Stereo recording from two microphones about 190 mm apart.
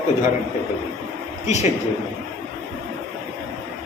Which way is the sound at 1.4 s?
35° left (ahead or behind).